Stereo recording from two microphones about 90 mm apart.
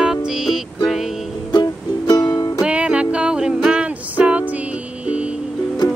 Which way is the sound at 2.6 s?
10° right (ahead or behind).